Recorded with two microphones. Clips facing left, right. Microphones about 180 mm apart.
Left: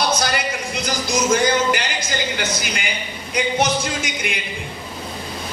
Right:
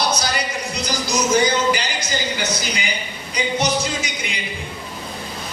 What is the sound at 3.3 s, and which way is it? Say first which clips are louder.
Music: left 1 dB; 50° left (ahead or behind).